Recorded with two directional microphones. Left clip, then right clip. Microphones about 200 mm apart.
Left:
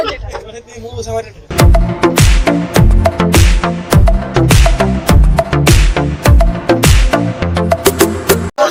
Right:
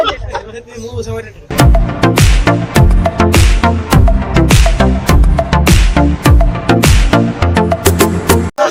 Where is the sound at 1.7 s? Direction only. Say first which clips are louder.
Even; centre (ahead or behind).